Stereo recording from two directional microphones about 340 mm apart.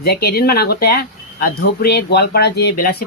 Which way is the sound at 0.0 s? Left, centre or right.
Left.